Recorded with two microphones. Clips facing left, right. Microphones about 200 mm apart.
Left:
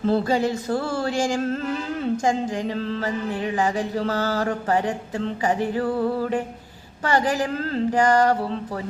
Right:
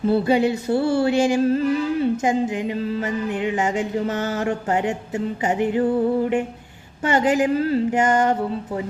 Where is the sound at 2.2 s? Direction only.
20° right (ahead or behind).